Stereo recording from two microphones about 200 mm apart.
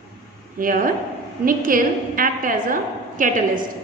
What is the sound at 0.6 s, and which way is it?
A woman's voice, 45° right (ahead or behind).